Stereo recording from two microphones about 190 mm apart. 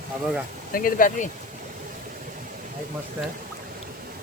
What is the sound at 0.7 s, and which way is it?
Speech, 45° left (ahead or behind).